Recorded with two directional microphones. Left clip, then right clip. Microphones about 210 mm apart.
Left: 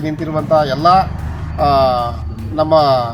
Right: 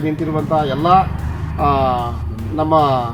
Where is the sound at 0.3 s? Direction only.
25° left (ahead or behind).